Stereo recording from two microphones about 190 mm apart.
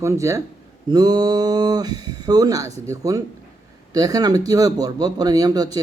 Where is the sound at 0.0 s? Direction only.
15° right (ahead or behind).